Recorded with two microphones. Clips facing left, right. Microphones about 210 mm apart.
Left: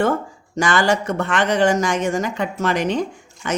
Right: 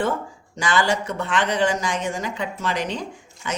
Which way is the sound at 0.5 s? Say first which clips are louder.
Left 4 dB; 45° left (ahead or behind).